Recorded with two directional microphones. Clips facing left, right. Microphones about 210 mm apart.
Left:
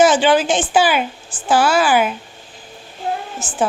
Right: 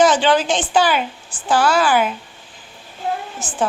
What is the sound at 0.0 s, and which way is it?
A woman's voice, 10° left (ahead or behind).